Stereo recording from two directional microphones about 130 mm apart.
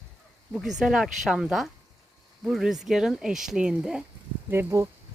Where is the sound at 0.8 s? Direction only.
5° right (ahead or behind).